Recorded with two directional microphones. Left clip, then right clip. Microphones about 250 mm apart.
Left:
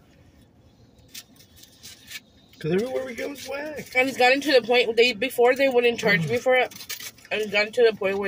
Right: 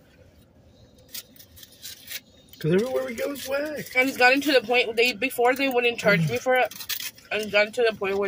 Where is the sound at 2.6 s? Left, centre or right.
Centre.